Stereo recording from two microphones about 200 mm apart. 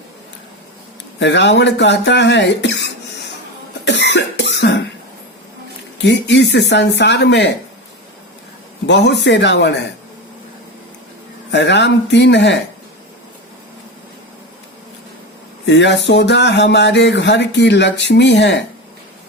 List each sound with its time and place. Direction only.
1.2 s speech: 60° left (ahead or behind)
3.8 s cough: 60° left (ahead or behind)
6.0 s speech: 60° left (ahead or behind)
8.9 s speech: 60° left (ahead or behind)
11.5 s speech: 60° left (ahead or behind)
15.6 s speech: 60° left (ahead or behind)